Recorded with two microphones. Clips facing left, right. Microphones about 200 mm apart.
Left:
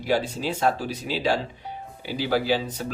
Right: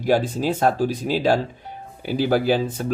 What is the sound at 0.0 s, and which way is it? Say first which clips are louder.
Speech: right 5 dB; 45° right (ahead or behind).